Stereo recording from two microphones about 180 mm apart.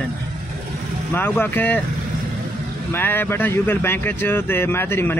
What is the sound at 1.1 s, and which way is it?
Speech, 10° left (ahead or behind).